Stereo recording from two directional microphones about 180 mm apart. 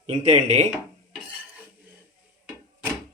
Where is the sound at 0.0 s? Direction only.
40° right (ahead or behind).